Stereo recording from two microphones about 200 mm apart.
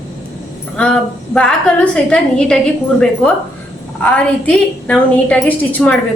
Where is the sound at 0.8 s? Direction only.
5° left (ahead or behind).